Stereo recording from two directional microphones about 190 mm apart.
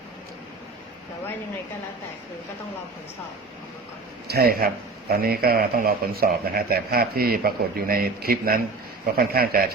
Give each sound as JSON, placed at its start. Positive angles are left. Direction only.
{"t": 4.3, "sound": "a man's voice", "side_deg": -55}